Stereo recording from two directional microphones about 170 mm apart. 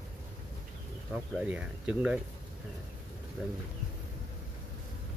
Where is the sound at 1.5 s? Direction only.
5° right (ahead or behind).